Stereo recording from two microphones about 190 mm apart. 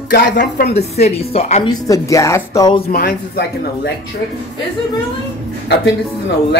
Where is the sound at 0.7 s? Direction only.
35° left (ahead or behind).